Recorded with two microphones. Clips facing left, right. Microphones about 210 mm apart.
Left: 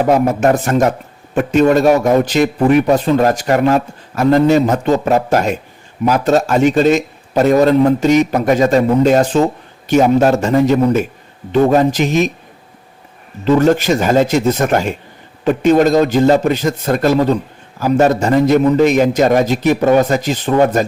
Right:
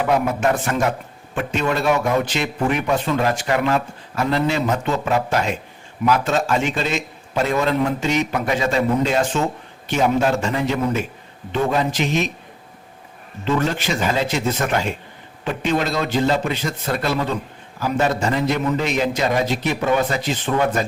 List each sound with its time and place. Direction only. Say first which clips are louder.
0.0 s a man's voice: left 7 dB; 40° left (ahead or behind)
13.4 s a man's voice: left 10 dB; 40° left (ahead or behind)